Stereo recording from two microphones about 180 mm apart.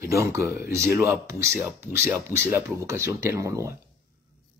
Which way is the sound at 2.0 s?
10° right (ahead or behind).